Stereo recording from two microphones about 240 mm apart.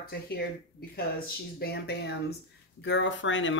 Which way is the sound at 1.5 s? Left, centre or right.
Left.